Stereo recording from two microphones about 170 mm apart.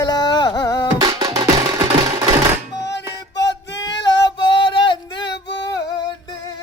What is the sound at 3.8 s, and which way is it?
Female singing, 25° left (ahead or behind).